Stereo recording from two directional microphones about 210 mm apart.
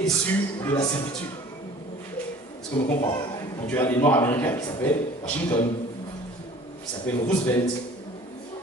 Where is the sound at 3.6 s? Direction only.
10° left (ahead or behind).